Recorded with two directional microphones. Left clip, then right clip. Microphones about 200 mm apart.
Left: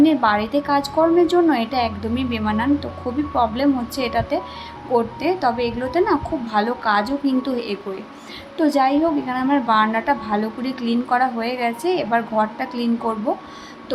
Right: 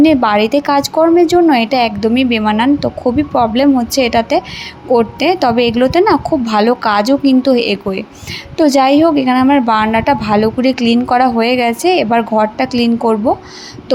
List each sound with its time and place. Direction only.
0.0 s a woman's voice: 35° right (ahead or behind)